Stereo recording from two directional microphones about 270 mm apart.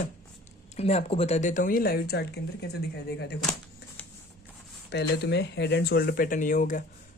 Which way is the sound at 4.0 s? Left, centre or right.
Centre.